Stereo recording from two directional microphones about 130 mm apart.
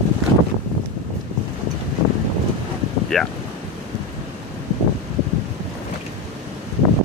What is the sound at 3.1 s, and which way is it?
Speech, 5° left (ahead or behind).